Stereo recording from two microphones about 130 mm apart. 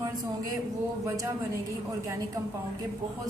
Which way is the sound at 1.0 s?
25° right (ahead or behind).